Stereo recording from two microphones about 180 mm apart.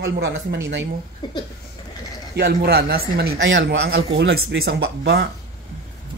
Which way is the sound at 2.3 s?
60° right (ahead or behind).